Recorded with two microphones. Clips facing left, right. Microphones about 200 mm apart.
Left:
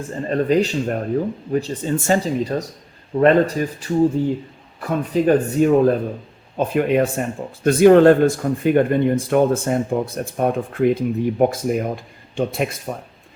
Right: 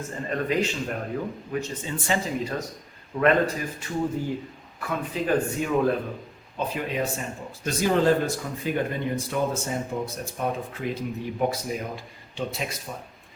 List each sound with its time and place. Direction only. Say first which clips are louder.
0.3 s speech: left 8 dB; 35° left (ahead or behind)
4.8 s speech: left 9 dB; 40° left (ahead or behind)
6.6 s speech: left 10 dB; 60° left (ahead or behind)